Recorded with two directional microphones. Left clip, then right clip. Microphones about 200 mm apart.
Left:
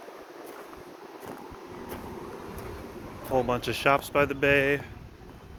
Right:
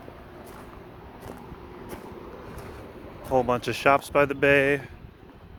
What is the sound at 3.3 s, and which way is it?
Speech, 35° right (ahead or behind).